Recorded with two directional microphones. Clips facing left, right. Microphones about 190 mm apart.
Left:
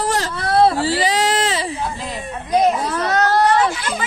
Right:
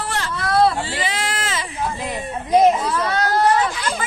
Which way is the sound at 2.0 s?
20° right (ahead or behind).